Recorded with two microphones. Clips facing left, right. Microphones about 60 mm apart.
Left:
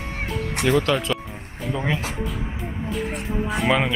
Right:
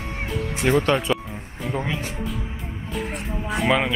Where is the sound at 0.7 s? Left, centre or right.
Centre.